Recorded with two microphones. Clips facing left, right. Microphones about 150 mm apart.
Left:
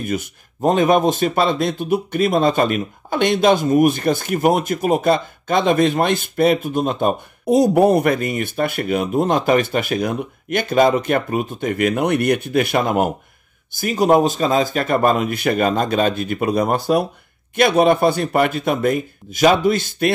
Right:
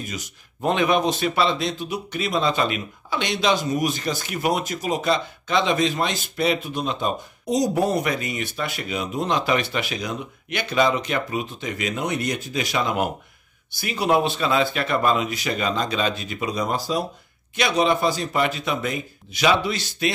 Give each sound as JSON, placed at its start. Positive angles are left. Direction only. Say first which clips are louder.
{"t": 0.0, "sound": "speech", "louder": "left 10 dB", "side_deg": 55}
{"t": 0.6, "sound": "speech", "louder": "left 5 dB", "side_deg": 40}